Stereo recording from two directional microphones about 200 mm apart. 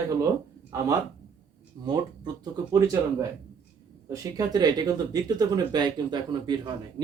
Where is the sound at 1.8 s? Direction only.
20° right (ahead or behind).